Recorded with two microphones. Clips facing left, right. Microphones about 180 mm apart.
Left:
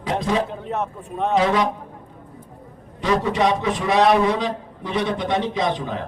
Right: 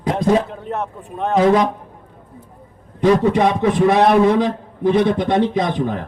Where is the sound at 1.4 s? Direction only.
45° right (ahead or behind).